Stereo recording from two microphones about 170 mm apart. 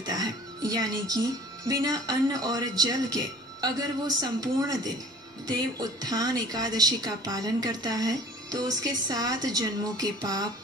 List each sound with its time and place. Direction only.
0.0 s a woman's voice: 20° right (ahead or behind)